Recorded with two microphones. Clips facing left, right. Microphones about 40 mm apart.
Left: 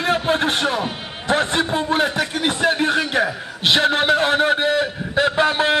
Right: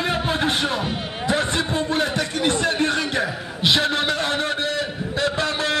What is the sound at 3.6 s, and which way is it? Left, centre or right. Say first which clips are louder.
A man's voice: left 4 dB; centre.